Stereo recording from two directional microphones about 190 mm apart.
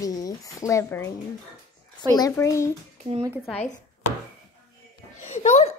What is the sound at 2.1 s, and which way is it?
Speech, 15° left (ahead or behind).